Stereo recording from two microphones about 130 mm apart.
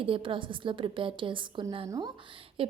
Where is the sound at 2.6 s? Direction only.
45° right (ahead or behind).